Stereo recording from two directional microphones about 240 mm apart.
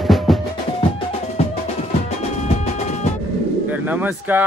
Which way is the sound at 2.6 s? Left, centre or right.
Left.